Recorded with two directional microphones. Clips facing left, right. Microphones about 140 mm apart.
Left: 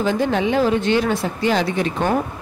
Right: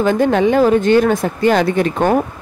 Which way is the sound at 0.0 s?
55° right (ahead or behind).